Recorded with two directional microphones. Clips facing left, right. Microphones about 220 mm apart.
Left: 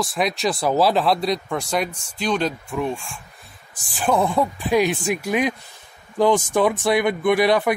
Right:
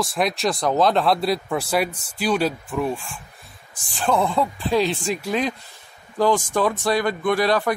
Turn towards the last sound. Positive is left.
turn(degrees=20)  # may be behind; listen again after turning